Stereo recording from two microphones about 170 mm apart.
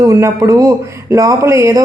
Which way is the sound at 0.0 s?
15° right (ahead or behind).